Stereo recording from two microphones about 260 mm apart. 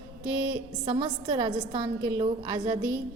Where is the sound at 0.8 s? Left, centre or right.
Centre.